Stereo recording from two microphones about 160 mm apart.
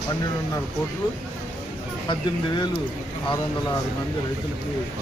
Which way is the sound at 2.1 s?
25° left (ahead or behind).